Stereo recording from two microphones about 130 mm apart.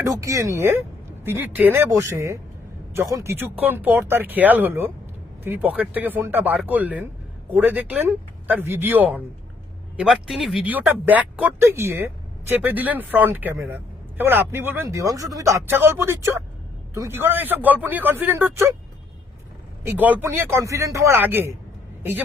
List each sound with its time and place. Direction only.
0.0 s speech: 25° right (ahead or behind); by 10.7 s centre (ahead or behind)
10.7 s speech: 15° right (ahead or behind)
19.8 s speech: 15° right (ahead or behind)